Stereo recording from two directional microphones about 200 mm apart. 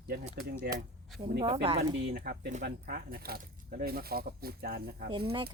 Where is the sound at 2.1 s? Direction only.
50° right (ahead or behind).